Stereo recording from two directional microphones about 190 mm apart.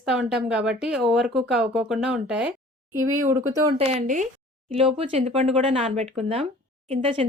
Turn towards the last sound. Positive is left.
turn(degrees=-30)  # may be behind; listen again after turning